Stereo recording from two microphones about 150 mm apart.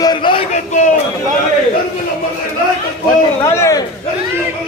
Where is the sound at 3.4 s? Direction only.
20° left (ahead or behind).